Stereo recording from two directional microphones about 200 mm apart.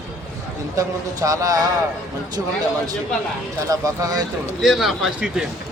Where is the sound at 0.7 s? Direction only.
15° right (ahead or behind).